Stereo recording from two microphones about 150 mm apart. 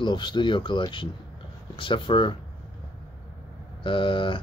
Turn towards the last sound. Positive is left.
turn(degrees=35)  # may be behind; listen again after turning